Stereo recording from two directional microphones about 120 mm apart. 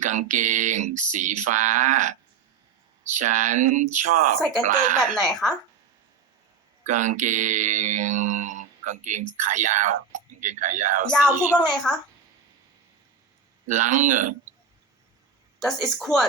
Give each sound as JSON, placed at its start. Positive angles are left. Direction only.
{"t": 0.0, "sound": "mantra", "side_deg": -90}
{"t": 3.2, "sound": "mantra", "side_deg": -90}
{"t": 4.4, "sound": "speech", "side_deg": 5}
{"t": 4.6, "sound": "mantra", "side_deg": -90}
{"t": 4.9, "sound": "speech", "side_deg": 5}
{"t": 6.8, "sound": "mantra", "side_deg": -90}
{"t": 11.5, "sound": "speech", "side_deg": 5}
{"t": 13.7, "sound": "mantra", "side_deg": -90}
{"t": 15.6, "sound": "speech", "side_deg": 0}